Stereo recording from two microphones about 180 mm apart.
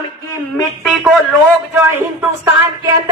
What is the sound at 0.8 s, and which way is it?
Speech, 5° right (ahead or behind).